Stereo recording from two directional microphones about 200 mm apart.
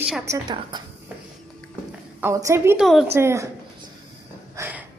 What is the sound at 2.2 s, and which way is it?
Speech, 15° right (ahead or behind).